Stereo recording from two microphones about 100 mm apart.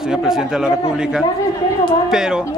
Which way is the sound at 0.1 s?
5° right (ahead or behind).